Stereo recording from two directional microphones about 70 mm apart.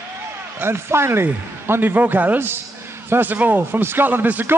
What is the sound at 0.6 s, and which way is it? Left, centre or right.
A man's voice, right.